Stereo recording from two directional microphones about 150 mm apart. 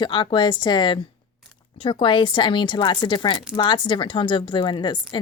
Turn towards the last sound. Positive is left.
turn(degrees=30)  # may be behind; listen again after turning